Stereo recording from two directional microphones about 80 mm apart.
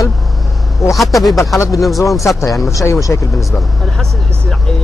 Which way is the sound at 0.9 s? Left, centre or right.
Centre.